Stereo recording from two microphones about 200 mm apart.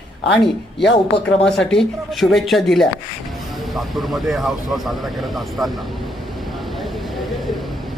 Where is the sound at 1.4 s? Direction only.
5° left (ahead or behind).